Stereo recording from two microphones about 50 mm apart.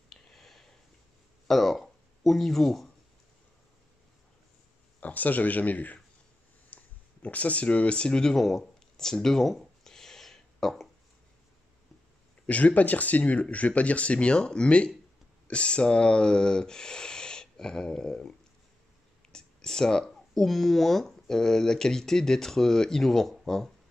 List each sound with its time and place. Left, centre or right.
0.1 s a sound: centre
1.5 s speech: centre
5.0 s speech: left; by 9.6 s centre
9.8 s a sound: centre
12.4 s speech: left
19.3 s speech: centre